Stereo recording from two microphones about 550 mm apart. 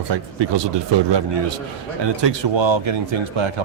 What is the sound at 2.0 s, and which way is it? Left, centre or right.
Speech, right.